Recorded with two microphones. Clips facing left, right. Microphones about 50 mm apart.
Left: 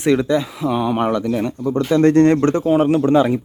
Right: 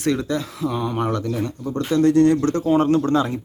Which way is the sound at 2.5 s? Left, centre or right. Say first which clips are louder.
Left 3 dB; left.